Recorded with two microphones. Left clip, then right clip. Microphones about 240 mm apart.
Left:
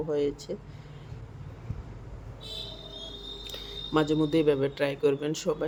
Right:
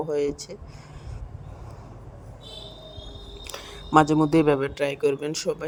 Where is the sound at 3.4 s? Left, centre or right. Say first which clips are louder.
Right 3 dB; right.